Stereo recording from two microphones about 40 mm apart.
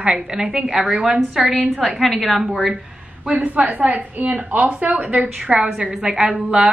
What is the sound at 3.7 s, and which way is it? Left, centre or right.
A woman's voice, right.